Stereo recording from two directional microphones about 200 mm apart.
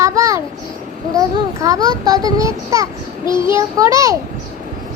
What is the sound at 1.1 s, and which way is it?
A child's voice, 15° right (ahead or behind).